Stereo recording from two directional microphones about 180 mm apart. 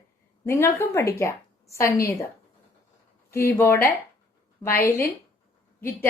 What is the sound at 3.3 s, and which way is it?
A woman's voice, 15° left (ahead or behind).